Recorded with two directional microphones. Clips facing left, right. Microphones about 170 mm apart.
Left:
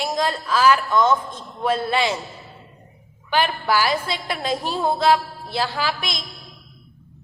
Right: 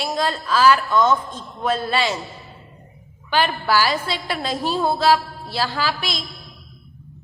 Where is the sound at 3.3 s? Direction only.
15° left (ahead or behind).